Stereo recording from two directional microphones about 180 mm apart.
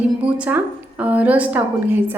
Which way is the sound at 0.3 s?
10° right (ahead or behind).